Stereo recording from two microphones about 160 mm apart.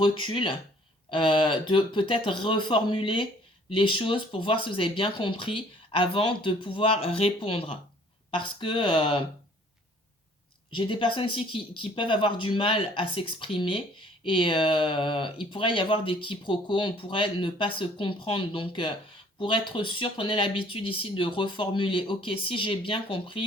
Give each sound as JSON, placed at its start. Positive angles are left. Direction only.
{"t": 0.0, "sound": "speech", "side_deg": 30}
{"t": 10.7, "sound": "speech", "side_deg": 30}